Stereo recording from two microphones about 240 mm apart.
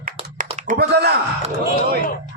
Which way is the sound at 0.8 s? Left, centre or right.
Right.